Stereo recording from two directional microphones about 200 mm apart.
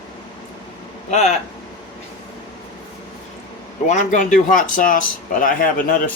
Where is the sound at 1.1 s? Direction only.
35° left (ahead or behind).